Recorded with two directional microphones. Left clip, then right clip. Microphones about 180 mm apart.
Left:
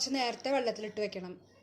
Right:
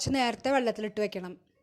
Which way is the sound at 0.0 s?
50° right (ahead or behind).